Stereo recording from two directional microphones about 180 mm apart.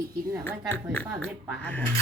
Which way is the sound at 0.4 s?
10° left (ahead or behind).